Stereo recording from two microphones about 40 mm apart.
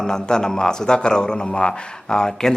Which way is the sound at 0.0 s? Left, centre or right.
Centre.